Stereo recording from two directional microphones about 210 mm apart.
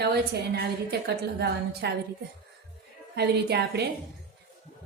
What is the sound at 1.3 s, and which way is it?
Speech, 55° right (ahead or behind).